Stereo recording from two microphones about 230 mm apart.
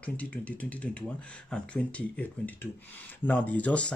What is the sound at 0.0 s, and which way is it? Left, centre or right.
Speech, centre.